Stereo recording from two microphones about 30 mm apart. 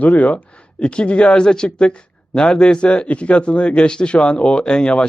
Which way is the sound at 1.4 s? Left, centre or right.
Left.